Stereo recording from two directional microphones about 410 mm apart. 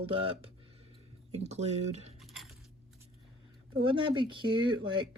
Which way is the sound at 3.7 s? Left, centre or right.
Centre.